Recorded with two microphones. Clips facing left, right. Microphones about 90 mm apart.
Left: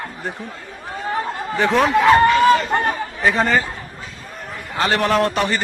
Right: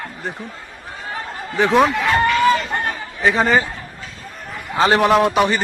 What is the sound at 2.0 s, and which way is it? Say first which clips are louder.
Chatter: left 3 dB; 35° left (ahead or behind).